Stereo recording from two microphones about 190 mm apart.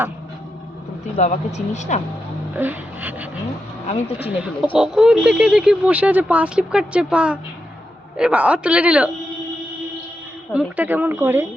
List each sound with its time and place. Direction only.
1.1 s speech: 35° left (ahead or behind)
2.6 s speech: 10° right (ahead or behind)
3.8 s speech: 35° left (ahead or behind)
4.2 s speech: 5° right (ahead or behind)
10.5 s speech: 5° right (ahead or behind)